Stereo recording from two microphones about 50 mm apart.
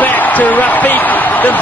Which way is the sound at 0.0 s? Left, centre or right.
Left.